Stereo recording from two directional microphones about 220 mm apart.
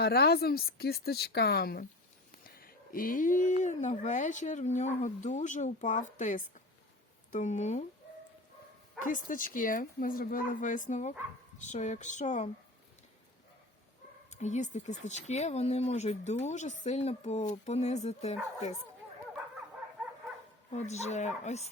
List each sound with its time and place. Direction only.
0.0 s speech: 45° left (ahead or behind)
9.0 s speech: 40° left (ahead or behind)
14.3 s speech: 35° left (ahead or behind)
20.7 s speech: 30° left (ahead or behind)